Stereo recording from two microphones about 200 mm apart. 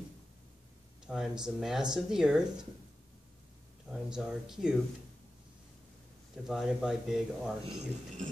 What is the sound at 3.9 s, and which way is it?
Speech, 5° right (ahead or behind).